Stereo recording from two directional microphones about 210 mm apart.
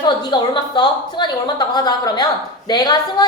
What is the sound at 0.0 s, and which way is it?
A woman's voice, 20° left (ahead or behind).